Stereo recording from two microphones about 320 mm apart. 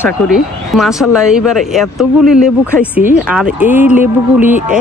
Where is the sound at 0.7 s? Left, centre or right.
Centre.